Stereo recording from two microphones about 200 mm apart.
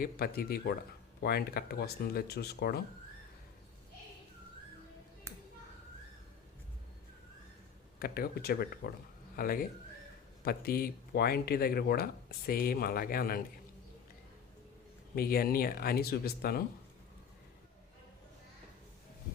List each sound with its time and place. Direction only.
0.0 s speech: 50° left (ahead or behind)
7.9 s speech: 50° left (ahead or behind)
15.1 s speech: 50° left (ahead or behind)